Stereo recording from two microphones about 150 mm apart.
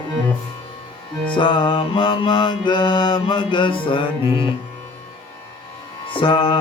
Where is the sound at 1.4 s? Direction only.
30° left (ahead or behind).